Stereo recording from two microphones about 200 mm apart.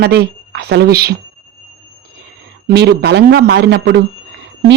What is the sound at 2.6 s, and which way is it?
A woman's voice, 55° right (ahead or behind).